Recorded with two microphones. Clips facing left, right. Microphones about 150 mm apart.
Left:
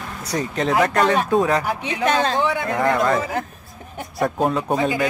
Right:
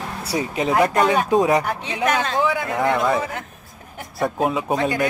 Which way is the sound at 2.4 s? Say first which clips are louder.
Even; centre (ahead or behind).